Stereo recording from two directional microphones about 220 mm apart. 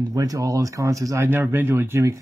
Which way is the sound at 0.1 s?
15° right (ahead or behind).